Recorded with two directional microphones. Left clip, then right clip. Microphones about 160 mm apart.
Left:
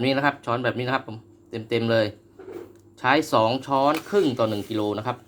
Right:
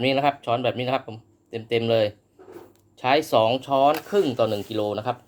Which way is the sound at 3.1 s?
35° right (ahead or behind).